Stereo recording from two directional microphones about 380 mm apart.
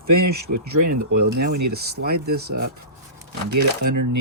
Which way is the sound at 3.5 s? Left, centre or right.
Right.